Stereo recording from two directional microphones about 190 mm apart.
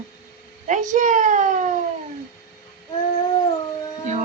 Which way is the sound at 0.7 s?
40° right (ahead or behind).